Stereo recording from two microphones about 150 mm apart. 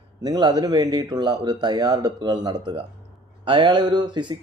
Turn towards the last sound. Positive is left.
turn(degrees=-30)  # may be behind; listen again after turning